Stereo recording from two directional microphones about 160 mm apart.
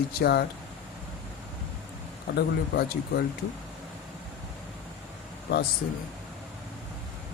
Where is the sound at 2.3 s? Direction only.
75° left (ahead or behind).